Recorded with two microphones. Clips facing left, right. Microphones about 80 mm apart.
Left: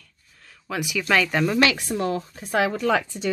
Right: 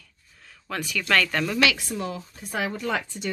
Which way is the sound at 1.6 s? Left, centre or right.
Left.